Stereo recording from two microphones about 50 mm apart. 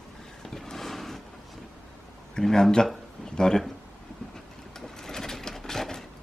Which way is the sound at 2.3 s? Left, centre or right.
Centre.